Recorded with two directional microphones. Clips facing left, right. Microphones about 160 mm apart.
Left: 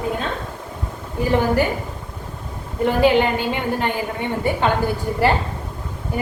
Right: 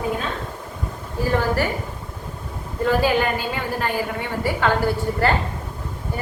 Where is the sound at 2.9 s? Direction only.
20° left (ahead or behind).